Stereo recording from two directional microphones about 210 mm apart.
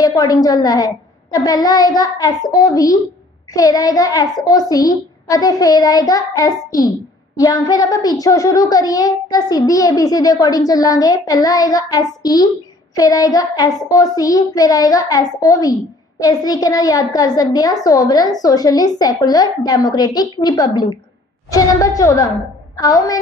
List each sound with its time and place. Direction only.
0.0 s a child's voice: 15° left (ahead or behind)